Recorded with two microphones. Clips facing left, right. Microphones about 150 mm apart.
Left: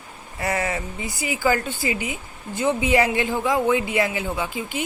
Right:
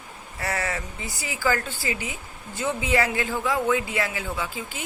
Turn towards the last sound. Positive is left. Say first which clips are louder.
# left 4 dB
turn(degrees=15)  # may be behind; listen again after turning